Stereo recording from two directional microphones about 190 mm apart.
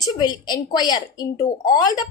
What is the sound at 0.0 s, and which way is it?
A woman's voice, 20° left (ahead or behind).